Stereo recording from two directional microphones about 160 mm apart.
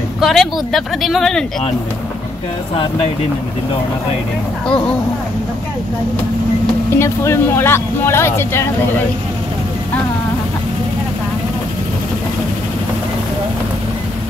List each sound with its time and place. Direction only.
0.2 s speech: centre (ahead or behind)
2.7 s speech: 35° left (ahead or behind)
7.0 s speech: 15° left (ahead or behind)